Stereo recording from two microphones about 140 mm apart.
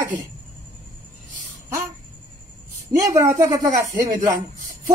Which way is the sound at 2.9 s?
20° right (ahead or behind).